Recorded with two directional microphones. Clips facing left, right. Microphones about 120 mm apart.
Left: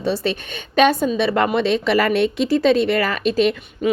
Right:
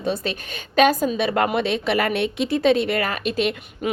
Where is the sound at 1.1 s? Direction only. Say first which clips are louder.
Left 3 dB; 30° left (ahead or behind).